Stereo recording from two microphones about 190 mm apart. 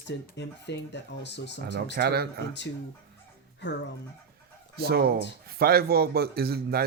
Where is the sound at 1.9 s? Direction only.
55° right (ahead or behind).